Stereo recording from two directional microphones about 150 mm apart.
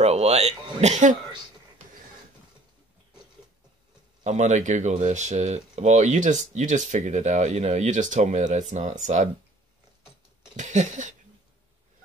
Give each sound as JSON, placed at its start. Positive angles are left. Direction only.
{"t": 0.0, "sound": "speech", "side_deg": -45}
{"t": 4.2, "sound": "speech", "side_deg": -50}
{"t": 10.5, "sound": "a sound", "side_deg": -55}